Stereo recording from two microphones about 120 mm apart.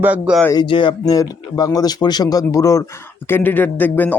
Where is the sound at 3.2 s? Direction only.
15° left (ahead or behind).